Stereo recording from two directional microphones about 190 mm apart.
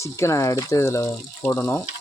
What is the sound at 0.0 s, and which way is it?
Speech, 15° left (ahead or behind).